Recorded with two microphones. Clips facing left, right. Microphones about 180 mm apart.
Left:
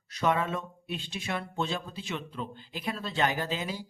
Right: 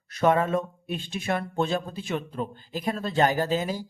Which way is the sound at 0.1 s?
50° right (ahead or behind).